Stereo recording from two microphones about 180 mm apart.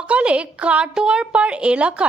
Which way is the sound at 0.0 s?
5° right (ahead or behind).